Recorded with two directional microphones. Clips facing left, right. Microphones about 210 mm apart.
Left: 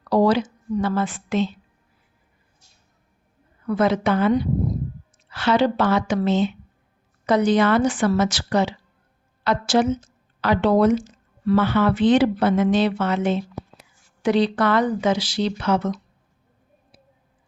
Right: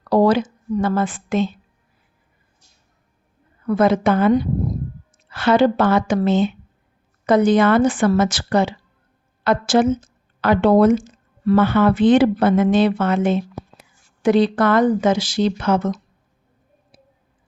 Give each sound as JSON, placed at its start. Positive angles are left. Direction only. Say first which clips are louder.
{"t": 0.1, "sound": "a sound", "louder": "right 3 dB", "side_deg": -50}
{"t": 0.8, "sound": "a woman's voice", "louder": "right 3 dB", "side_deg": -50}
{"t": 3.7, "sound": "a woman's voice", "louder": "right 4 dB", "side_deg": -50}